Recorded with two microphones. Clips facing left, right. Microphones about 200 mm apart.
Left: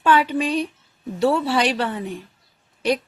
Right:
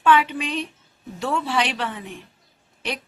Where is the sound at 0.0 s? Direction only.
40° left (ahead or behind).